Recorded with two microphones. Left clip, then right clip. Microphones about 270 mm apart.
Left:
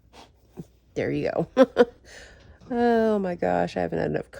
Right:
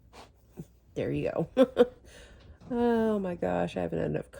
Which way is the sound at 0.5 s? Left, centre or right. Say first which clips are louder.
Left 5 dB; left.